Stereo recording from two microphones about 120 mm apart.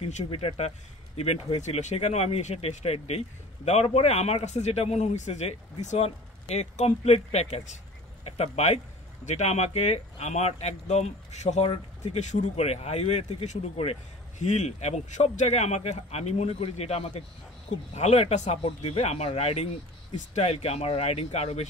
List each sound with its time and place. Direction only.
0.0 s speech: 60° left (ahead or behind)
14.4 s speech: 75° left (ahead or behind)